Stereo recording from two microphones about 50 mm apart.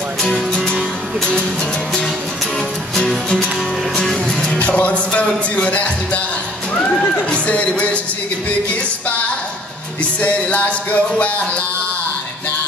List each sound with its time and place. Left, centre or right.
0.2 s music: centre
3.9 s music: centre
4.6 s music: left
6.7 s speech: left
10.2 s music: left